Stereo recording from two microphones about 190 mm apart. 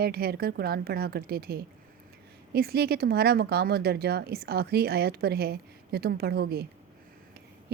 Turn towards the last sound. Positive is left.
turn(degrees=-55)  # may be behind; listen again after turning